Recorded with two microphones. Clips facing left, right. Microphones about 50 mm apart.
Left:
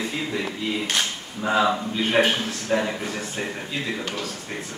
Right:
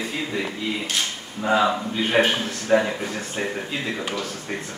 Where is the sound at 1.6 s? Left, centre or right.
Centre.